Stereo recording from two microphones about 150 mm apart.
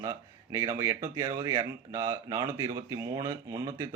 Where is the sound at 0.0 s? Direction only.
25° right (ahead or behind).